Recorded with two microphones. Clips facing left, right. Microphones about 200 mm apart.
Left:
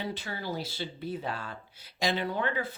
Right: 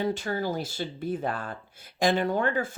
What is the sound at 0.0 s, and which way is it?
Speech, 45° right (ahead or behind).